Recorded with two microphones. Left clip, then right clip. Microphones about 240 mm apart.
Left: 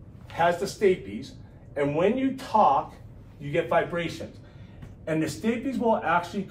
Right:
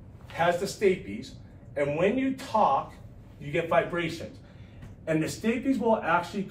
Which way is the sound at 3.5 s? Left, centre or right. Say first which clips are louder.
Left 1 dB; centre.